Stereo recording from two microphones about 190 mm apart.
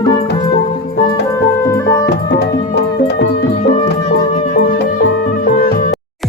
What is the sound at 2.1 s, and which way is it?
Music, 60° left (ahead or behind).